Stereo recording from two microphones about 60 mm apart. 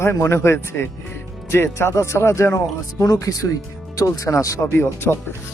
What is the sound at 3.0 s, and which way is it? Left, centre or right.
Speech, left.